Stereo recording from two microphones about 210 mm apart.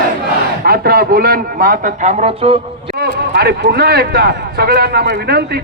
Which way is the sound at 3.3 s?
50° right (ahead or behind).